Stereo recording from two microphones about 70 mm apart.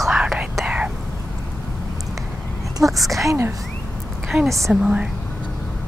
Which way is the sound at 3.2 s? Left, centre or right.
Right.